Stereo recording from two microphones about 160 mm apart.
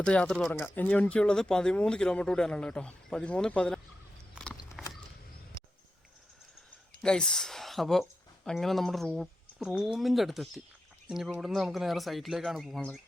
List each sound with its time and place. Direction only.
0.0 s speech: 5° left (ahead or behind)
4.5 s a sound: 20° left (ahead or behind)
7.0 s speech: 5° left (ahead or behind)